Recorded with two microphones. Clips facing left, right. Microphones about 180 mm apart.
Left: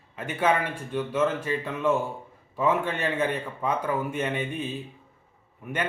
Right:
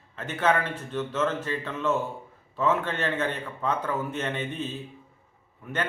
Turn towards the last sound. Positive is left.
turn(degrees=10)  # may be behind; listen again after turning